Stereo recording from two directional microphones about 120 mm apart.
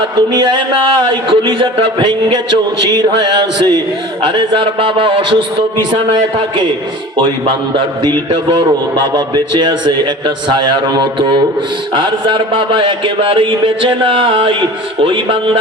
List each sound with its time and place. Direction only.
0.2 s speech: 40° right (ahead or behind)
8.0 s speech: 40° right (ahead or behind)